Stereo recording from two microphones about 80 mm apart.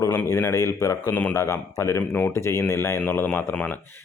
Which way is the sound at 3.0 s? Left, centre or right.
Left.